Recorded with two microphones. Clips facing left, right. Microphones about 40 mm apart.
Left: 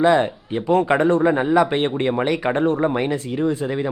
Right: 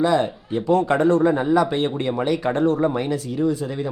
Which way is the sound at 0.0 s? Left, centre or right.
Left.